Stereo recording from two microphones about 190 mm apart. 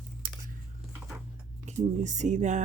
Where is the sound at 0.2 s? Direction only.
50° right (ahead or behind).